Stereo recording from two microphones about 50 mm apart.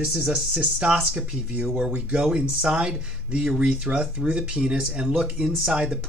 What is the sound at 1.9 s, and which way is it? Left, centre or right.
Speech, right.